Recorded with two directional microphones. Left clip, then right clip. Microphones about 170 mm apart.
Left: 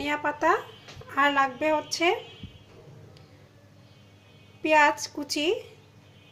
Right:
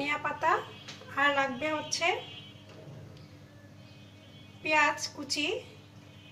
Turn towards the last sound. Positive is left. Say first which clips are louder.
# left 5 dB
turn(degrees=55)  # may be behind; listen again after turning